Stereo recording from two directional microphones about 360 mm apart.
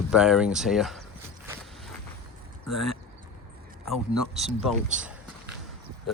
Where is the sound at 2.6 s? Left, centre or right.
Left.